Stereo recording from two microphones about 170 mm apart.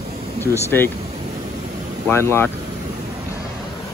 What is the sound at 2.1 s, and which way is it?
Speech, 15° left (ahead or behind).